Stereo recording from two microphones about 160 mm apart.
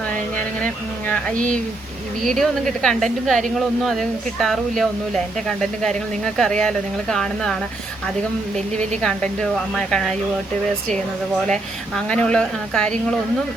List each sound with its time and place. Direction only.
0.3 s a sound: 10° left (ahead or behind)
2.2 s speech: 5° left (ahead or behind)
8.7 s a woman's voice: 45° right (ahead or behind)
9.0 s speech: 5° left (ahead or behind)
11.9 s speech: 5° left (ahead or behind)